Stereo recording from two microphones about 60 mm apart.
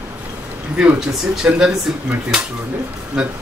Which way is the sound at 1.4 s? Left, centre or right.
Centre.